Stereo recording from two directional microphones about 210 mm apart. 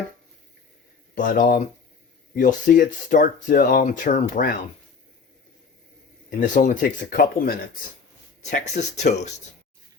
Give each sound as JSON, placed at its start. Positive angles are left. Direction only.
{"t": 1.1, "sound": "speech", "side_deg": 40}
{"t": 6.4, "sound": "speech", "side_deg": 40}
{"t": 8.4, "sound": "speech", "side_deg": 35}